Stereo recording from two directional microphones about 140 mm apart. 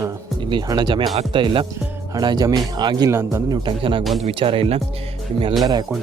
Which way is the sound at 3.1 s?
20° right (ahead or behind).